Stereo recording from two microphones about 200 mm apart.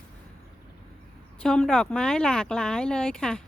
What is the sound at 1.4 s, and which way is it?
Speech, 5° left (ahead or behind).